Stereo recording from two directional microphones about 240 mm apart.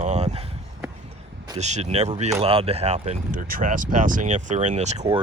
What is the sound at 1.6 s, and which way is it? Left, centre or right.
Speech, right.